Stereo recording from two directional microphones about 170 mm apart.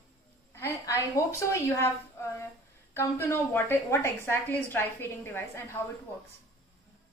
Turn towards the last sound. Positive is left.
turn(degrees=15)  # may be behind; listen again after turning